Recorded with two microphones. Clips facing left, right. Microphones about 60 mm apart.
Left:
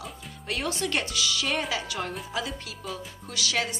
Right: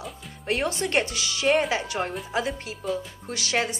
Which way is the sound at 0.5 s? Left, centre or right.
Right.